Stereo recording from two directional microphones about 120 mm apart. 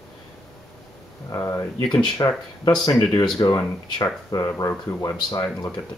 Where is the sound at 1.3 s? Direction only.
25° left (ahead or behind).